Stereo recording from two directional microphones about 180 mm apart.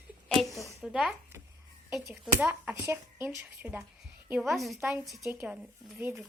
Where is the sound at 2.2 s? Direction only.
5° right (ahead or behind).